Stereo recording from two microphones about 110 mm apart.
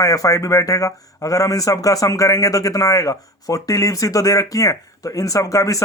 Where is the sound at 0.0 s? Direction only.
30° left (ahead or behind).